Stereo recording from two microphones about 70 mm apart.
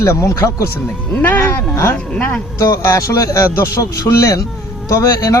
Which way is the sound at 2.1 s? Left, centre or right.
Centre.